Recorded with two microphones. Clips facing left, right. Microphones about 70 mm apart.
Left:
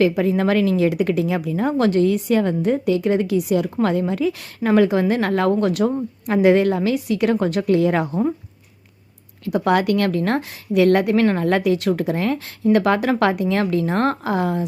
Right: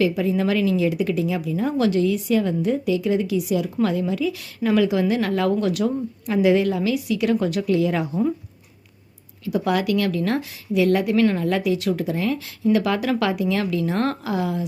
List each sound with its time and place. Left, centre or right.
0.0 s a woman's voice: left
9.4 s a woman's voice: left